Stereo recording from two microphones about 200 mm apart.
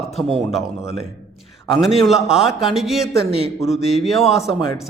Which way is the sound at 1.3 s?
Centre (ahead or behind).